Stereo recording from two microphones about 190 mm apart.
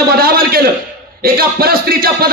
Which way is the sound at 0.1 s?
50° right (ahead or behind).